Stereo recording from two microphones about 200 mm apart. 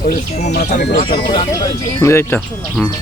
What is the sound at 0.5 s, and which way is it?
Speech, 55° left (ahead or behind).